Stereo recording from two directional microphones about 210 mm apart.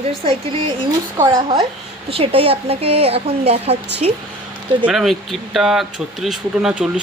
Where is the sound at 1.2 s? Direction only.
20° right (ahead or behind).